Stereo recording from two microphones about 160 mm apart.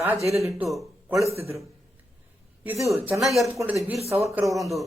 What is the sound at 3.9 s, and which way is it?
Speech, 40° right (ahead or behind).